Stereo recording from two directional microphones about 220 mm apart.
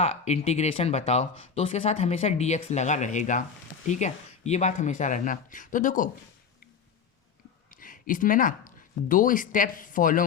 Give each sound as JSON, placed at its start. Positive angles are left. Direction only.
{"t": 0.0, "sound": "speech", "side_deg": 30}
{"t": 7.7, "sound": "speech", "side_deg": 40}